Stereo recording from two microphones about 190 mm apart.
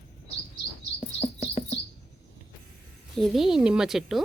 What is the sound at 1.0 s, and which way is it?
Chirp, 35° left (ahead or behind).